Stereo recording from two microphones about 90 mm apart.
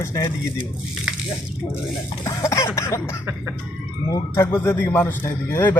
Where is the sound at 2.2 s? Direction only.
35° left (ahead or behind).